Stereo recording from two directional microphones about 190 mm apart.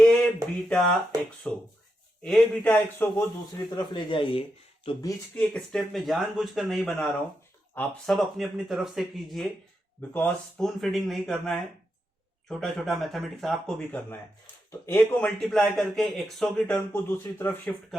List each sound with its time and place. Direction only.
0.0 s a sound: 5° left (ahead or behind)
0.7 s a man's voice: 5° left (ahead or behind)
3.8 s speech: 25° left (ahead or behind)
5.4 s speech: 5° left (ahead or behind)